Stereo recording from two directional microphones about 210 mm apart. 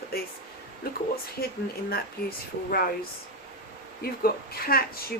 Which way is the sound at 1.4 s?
45° left (ahead or behind).